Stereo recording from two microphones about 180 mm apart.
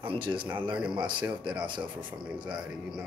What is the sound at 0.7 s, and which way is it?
Music, 5° right (ahead or behind).